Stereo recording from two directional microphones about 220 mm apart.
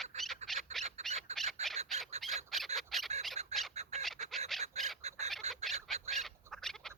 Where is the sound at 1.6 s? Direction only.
30° right (ahead or behind).